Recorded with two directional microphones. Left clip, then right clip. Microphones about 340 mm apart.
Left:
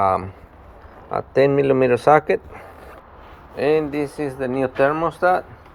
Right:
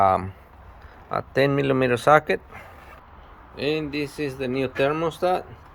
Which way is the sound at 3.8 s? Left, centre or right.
Centre.